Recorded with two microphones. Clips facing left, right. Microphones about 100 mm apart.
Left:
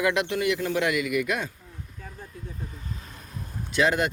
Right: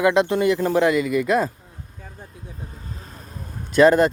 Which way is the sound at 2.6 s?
40° right (ahead or behind).